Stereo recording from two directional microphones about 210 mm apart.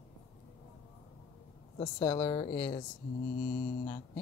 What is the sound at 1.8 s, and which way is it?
Speech, 25° left (ahead or behind).